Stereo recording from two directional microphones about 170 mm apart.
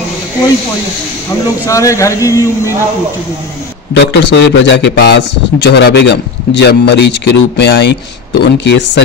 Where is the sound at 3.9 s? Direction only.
90° left.